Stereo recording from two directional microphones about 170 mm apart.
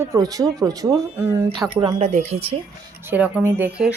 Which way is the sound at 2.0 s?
40° right (ahead or behind).